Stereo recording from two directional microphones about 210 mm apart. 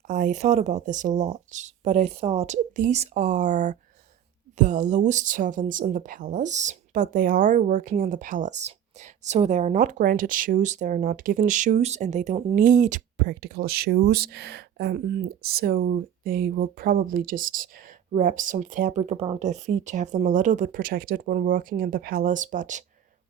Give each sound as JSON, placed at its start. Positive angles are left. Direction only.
{"t": 0.1, "sound": "speech", "side_deg": -35}